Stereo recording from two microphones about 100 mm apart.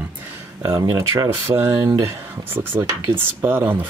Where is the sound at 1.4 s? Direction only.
20° right (ahead or behind).